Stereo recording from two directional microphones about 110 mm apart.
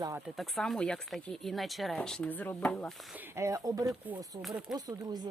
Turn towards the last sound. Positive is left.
turn(degrees=-35)  # may be behind; listen again after turning